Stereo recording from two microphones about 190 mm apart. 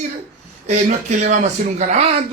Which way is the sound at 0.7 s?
40° right (ahead or behind).